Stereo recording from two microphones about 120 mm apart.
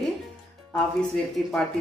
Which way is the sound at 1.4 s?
5° left (ahead or behind).